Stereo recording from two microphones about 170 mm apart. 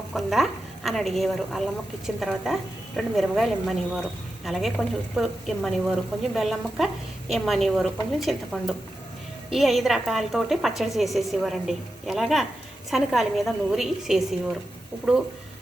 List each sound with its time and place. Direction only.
0.1 s a woman's voice: centre (ahead or behind)